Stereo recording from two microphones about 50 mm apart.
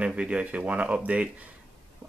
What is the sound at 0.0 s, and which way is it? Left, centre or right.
Speech, right.